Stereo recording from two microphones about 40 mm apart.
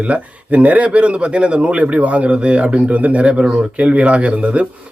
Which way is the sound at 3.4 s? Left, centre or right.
Centre.